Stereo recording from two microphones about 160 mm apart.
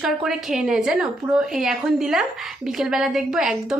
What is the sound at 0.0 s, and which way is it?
A woman's voice, centre (ahead or behind).